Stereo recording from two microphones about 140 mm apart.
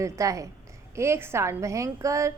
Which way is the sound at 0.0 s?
20° right (ahead or behind).